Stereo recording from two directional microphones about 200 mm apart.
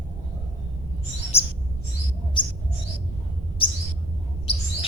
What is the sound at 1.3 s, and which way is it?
Chirp, 30° left (ahead or behind).